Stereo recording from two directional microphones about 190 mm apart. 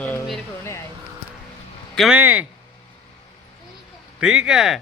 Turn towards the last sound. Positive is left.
turn(degrees=0)  # may be behind; listen again after turning